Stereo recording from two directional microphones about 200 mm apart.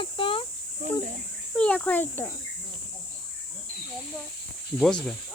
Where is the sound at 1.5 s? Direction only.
5° left (ahead or behind).